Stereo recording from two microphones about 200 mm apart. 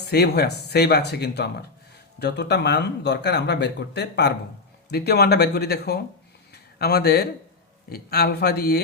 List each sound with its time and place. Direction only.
0.1 s speech: 55° left (ahead or behind)
6.5 s a sound: 55° left (ahead or behind)
7.9 s speech: 50° left (ahead or behind)